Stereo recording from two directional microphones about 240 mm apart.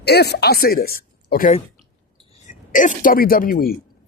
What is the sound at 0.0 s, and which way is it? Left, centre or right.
Speech, left.